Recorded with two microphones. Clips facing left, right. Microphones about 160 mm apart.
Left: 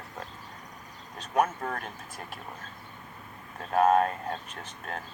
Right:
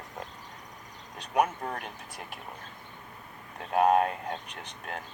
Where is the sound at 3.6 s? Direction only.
15° right (ahead or behind).